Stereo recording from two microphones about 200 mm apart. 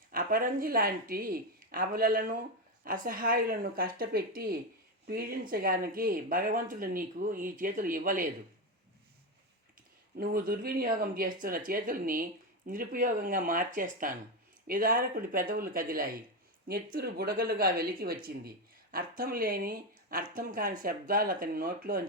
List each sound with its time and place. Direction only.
0.1 s speech: 45° right (ahead or behind)
10.2 s speech: 45° right (ahead or behind)